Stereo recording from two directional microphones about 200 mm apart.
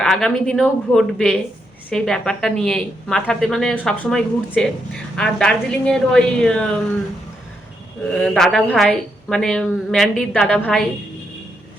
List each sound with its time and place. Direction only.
0.0 s a woman's voice: 5° left (ahead or behind)
8.2 s a woman's voice: 5° left (ahead or behind)